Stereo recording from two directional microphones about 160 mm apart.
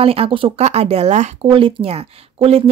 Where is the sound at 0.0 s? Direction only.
35° right (ahead or behind).